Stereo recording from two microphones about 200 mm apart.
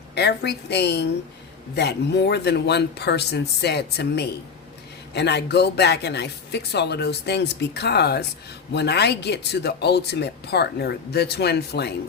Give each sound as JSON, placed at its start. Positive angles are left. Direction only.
{"t": 0.1, "sound": "speech", "side_deg": 55}